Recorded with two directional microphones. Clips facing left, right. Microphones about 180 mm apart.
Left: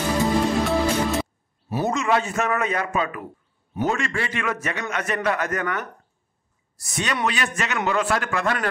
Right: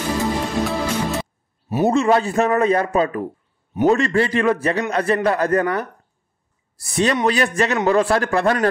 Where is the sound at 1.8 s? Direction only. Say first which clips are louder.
Right 6 dB; 35° right (ahead or behind).